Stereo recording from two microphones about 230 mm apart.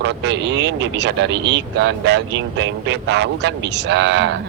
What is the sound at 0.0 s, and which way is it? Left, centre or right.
Speech, right.